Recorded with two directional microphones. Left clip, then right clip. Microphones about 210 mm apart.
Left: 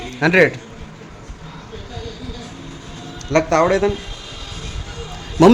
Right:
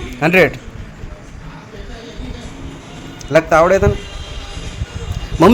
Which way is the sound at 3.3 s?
5° left (ahead or behind).